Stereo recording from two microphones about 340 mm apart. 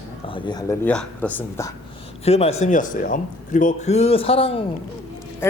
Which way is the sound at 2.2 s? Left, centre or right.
Centre.